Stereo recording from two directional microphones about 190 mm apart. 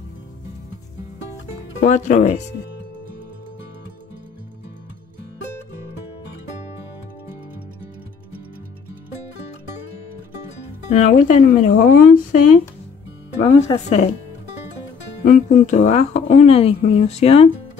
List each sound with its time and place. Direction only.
1.8 s speech: 40° left (ahead or behind)
10.9 s speech: 40° left (ahead or behind)
13.8 s speech: 35° left (ahead or behind)
15.2 s speech: 40° left (ahead or behind)